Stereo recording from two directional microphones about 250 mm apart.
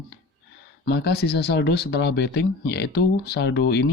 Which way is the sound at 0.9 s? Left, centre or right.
Left.